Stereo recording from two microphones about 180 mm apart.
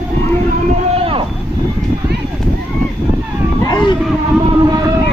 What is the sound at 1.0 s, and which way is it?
Vehicle, 30° right (ahead or behind).